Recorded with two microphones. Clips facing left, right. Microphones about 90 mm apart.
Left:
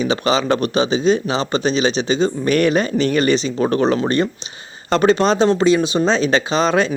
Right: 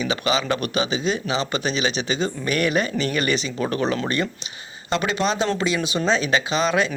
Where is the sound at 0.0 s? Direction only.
35° left (ahead or behind).